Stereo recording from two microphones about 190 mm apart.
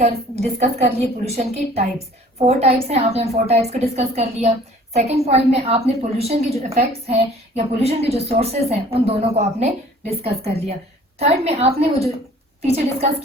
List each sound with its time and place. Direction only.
0.0 s a woman's voice: 35° right (ahead or behind)